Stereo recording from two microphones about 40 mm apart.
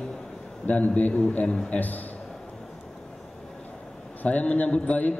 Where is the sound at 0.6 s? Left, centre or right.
Left.